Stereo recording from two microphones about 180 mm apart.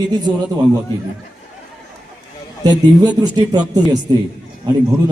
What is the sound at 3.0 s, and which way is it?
A man's voice, 20° right (ahead or behind).